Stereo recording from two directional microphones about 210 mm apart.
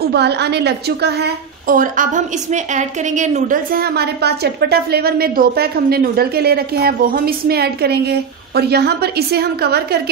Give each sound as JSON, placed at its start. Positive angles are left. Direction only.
{"t": 0.1, "sound": "a woman's voice", "side_deg": -50}